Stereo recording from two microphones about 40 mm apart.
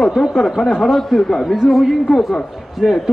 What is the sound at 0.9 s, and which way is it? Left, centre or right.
Speech, centre.